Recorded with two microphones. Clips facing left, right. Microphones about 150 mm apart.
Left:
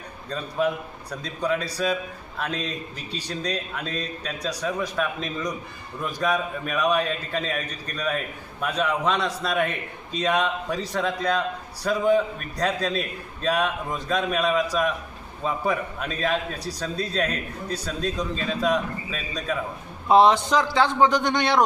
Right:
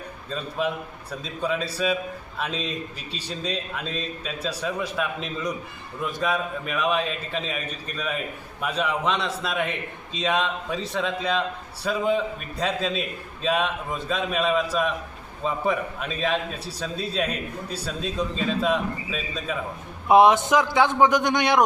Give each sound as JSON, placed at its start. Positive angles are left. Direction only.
{"t": 1.1, "sound": "a man's voice", "side_deg": -5}
{"t": 20.1, "sound": "a man's voice", "side_deg": -15}